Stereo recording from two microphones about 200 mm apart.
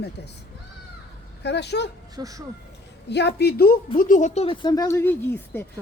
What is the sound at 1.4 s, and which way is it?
Speech, 60° left (ahead or behind).